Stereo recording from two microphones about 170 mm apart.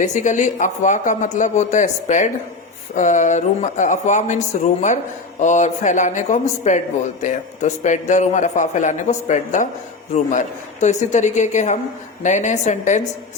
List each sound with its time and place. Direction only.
0.0 s speech: 45° left (ahead or behind)